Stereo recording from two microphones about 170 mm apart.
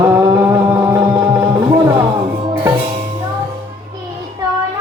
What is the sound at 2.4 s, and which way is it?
Music, 25° right (ahead or behind).